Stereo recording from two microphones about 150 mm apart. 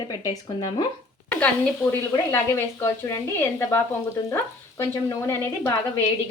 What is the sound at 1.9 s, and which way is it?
Speech, 20° left (ahead or behind).